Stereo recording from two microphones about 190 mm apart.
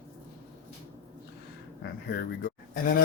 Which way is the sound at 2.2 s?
50° left (ahead or behind).